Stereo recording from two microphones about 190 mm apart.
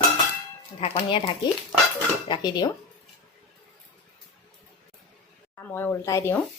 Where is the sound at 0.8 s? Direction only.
30° left (ahead or behind).